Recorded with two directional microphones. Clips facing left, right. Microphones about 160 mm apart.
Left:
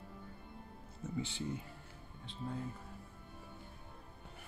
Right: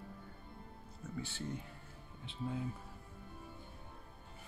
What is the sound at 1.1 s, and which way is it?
Speech, 15° left (ahead or behind).